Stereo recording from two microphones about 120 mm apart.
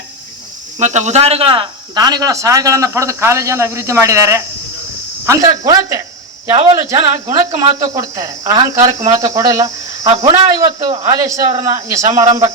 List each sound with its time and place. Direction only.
0.8 s speech: 75° right (ahead or behind); by 1.6 s 50° right (ahead or behind)
2.0 s speech: 35° right (ahead or behind)